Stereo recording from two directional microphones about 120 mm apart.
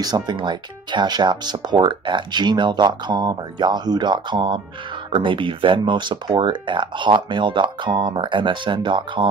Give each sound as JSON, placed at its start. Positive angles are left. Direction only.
{"t": 0.0, "sound": "speech", "side_deg": -35}